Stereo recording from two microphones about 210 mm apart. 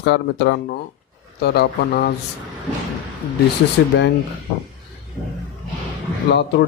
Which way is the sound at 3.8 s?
55° left (ahead or behind).